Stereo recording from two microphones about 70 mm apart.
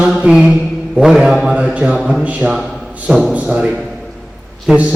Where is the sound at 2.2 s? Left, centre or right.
Centre.